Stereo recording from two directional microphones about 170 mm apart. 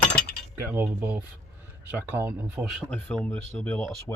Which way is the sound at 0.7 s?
15° right (ahead or behind).